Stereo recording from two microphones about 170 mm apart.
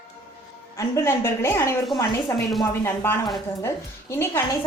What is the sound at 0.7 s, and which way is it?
A woman's voice, 15° left (ahead or behind).